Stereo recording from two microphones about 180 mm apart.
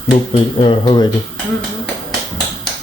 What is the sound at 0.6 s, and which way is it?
Speech, 25° left (ahead or behind).